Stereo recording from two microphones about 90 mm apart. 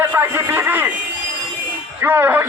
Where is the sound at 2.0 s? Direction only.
20° right (ahead or behind).